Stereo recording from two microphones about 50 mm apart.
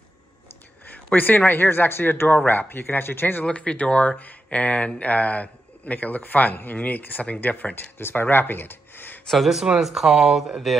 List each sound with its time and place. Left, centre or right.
0.8 s speech: left
3.4 s speech: left
9.3 s speech: centre